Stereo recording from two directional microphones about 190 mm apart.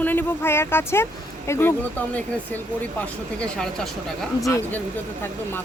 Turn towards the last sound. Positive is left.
turn(degrees=15)  # may be behind; listen again after turning